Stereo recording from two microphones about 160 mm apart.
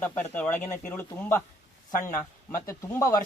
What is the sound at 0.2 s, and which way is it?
A man's voice, 10° left (ahead or behind).